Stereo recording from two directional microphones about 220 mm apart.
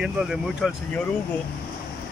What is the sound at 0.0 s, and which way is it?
Speech, 5° right (ahead or behind).